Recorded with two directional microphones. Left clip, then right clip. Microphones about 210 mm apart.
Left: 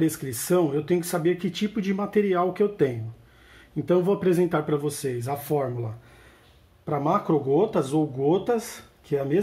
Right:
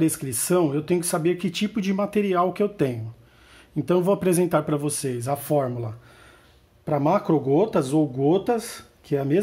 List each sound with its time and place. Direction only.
0.0 s speech: 40° right (ahead or behind)
6.9 s speech: 45° right (ahead or behind)